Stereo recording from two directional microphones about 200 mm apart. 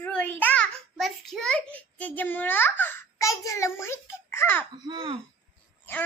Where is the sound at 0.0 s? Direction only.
5° left (ahead or behind).